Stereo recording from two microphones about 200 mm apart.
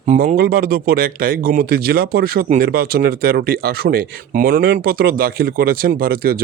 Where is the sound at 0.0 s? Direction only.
35° right (ahead or behind).